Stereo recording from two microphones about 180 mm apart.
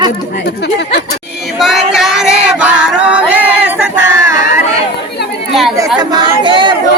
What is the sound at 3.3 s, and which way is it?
Female singing, 5° right (ahead or behind).